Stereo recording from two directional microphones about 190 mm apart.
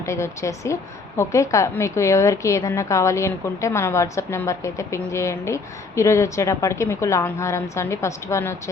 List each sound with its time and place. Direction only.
0.0 s a woman's voice: 15° left (ahead or behind)